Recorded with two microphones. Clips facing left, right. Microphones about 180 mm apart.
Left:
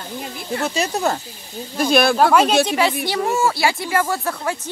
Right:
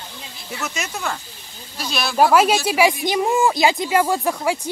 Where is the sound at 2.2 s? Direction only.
5° right (ahead or behind).